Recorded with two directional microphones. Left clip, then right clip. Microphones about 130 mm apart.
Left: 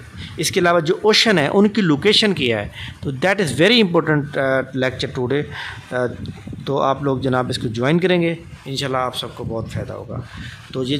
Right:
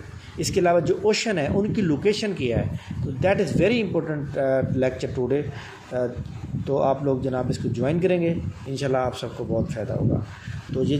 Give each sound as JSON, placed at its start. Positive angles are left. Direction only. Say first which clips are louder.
{"t": 0.4, "sound": "speech", "louder": "left 4 dB", "side_deg": 30}
{"t": 4.4, "sound": "speech", "louder": "right 1 dB", "side_deg": 30}
{"t": 10.7, "sound": "speech", "louder": "left 2 dB", "side_deg": 25}